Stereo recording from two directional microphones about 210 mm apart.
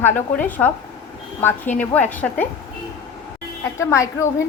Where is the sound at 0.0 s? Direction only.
10° left (ahead or behind).